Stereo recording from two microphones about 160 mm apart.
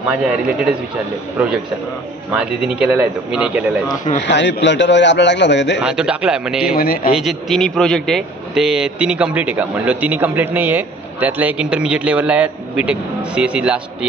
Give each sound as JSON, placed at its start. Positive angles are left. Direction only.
{"t": 2.3, "sound": "a man's voice", "side_deg": -5}
{"t": 4.2, "sound": "a man's voice", "side_deg": 90}
{"t": 5.9, "sound": "a man's voice", "side_deg": -5}
{"t": 6.6, "sound": "a man's voice", "side_deg": 70}
{"t": 7.2, "sound": "a man's voice", "side_deg": 0}